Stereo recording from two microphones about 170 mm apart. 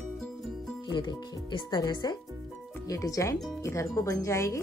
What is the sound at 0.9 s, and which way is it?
Speech, 25° left (ahead or behind).